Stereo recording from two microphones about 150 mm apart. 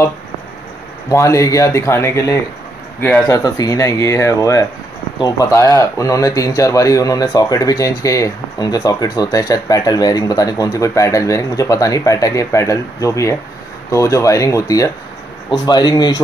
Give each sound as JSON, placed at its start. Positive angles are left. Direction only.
{"t": 1.0, "sound": "speech", "side_deg": 20}
{"t": 3.0, "sound": "speech", "side_deg": 5}
{"t": 3.3, "sound": "speech", "side_deg": 25}